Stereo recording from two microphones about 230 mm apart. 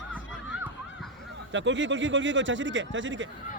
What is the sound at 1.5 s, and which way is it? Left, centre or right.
Speech, right.